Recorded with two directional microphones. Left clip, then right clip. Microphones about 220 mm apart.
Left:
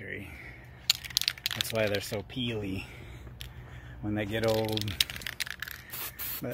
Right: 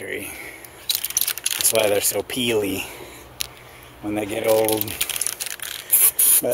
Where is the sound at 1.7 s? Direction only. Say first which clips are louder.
Right 13 dB; 20° right (ahead or behind).